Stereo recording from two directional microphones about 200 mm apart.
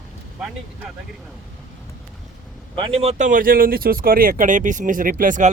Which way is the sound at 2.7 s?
25° right (ahead or behind).